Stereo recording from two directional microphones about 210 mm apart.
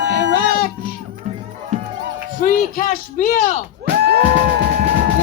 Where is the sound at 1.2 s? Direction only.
35° right (ahead or behind).